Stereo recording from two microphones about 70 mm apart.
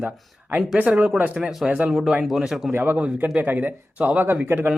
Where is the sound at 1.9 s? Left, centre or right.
Centre.